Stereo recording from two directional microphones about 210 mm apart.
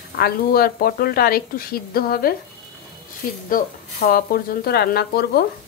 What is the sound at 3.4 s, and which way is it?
Speech, 45° left (ahead or behind).